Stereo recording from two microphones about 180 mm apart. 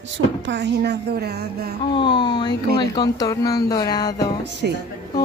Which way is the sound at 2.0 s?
25° left (ahead or behind).